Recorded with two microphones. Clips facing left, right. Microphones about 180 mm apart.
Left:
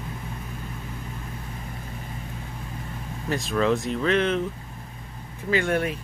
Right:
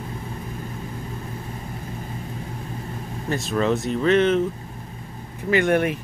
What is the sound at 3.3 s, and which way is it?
Speech, centre (ahead or behind).